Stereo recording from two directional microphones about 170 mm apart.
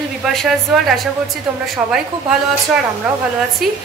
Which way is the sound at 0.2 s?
Centre (ahead or behind).